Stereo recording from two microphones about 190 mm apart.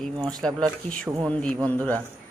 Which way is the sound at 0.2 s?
20° right (ahead or behind).